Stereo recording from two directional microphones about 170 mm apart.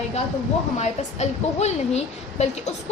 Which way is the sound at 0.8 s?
40° left (ahead or behind).